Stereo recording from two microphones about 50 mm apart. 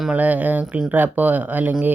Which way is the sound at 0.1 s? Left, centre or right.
Right.